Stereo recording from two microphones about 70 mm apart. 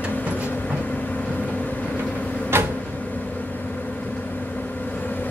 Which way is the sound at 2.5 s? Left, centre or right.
Right.